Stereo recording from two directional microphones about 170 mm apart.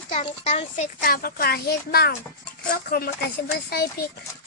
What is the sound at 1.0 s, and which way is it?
A woman's voice, 60° left (ahead or behind).